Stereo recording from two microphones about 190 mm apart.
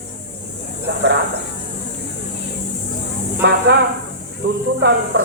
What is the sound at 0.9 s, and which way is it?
Speech, 65° right (ahead or behind).